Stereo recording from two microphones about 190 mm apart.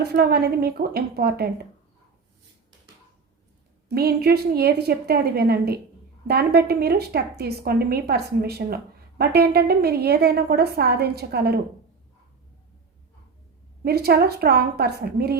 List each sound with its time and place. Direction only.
0.0 s a woman's voice: 55° right (ahead or behind)
3.8 s a woman's voice: 55° right (ahead or behind)
13.8 s a woman's voice: 55° right (ahead or behind)